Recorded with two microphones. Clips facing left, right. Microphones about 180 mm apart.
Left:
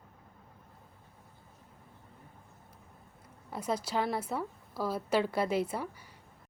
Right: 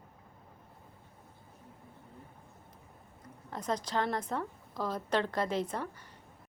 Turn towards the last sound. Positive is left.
turn(degrees=10)  # may be behind; listen again after turning